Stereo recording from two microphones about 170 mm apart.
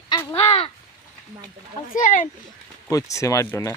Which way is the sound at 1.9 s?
50° left (ahead or behind).